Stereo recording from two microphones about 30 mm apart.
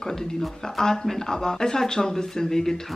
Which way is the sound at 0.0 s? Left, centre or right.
Centre.